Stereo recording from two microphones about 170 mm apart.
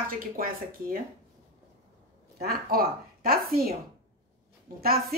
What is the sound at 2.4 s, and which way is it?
A woman's voice, 60° right (ahead or behind).